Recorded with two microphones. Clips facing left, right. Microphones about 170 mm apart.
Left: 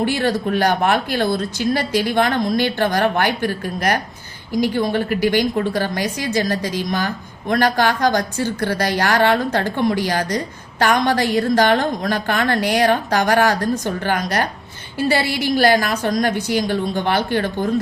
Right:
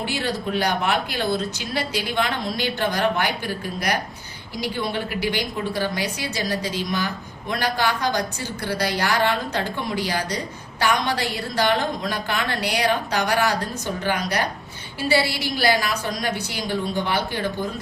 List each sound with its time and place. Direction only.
0.0 s a woman's voice: 50° left (ahead or behind)